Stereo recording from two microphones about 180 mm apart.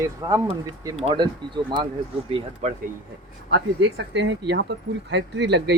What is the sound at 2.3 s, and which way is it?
Speech, 40° right (ahead or behind).